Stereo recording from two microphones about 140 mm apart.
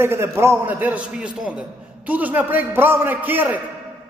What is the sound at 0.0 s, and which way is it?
A man's voice, 15° right (ahead or behind).